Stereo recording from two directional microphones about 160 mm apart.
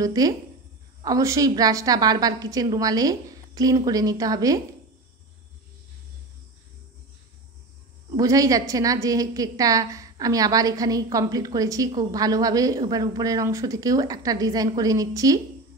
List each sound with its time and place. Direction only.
0.0 s a woman's voice: 25° right (ahead or behind)
8.2 s a woman's voice: 20° right (ahead or behind)